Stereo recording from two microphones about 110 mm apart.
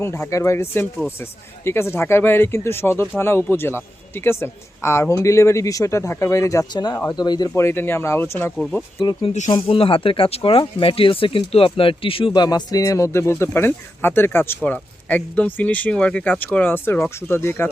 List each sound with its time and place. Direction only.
0.0 s speech: 25° left (ahead or behind)
7.1 s speech: 40° left (ahead or behind)
7.5 s speech: 20° left (ahead or behind)
9.0 s speech: 50° left (ahead or behind); by 17.7 s 20° left (ahead or behind)